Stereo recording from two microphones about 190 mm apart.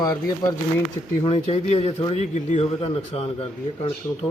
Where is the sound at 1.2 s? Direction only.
30° left (ahead or behind).